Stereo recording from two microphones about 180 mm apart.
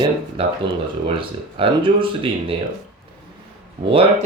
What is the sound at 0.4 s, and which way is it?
Speech, 30° right (ahead or behind).